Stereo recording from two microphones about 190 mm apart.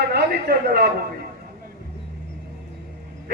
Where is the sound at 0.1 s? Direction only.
55° right (ahead or behind).